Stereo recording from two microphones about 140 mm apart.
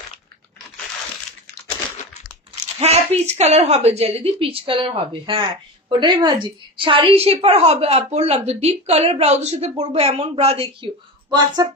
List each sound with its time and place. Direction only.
2.8 s a woman's voice: 50° right (ahead or behind); by 11.6 s 30° right (ahead or behind)